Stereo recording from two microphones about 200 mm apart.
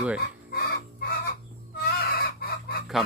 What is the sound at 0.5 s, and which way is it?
Chicken, 50° left (ahead or behind).